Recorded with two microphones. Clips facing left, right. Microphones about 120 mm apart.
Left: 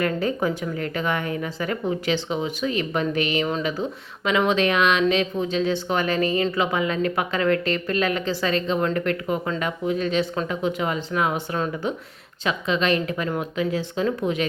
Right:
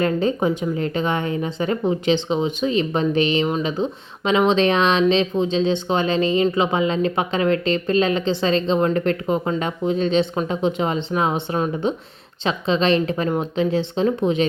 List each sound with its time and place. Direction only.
0.0 s speech: 25° right (ahead or behind)